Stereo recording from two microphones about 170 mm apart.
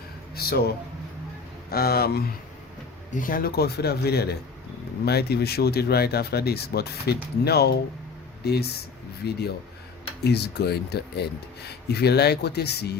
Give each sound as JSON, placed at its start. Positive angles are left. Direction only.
{"t": 0.3, "sound": "speech", "side_deg": 65}
{"t": 1.7, "sound": "speech", "side_deg": 65}
{"t": 3.1, "sound": "speech", "side_deg": 55}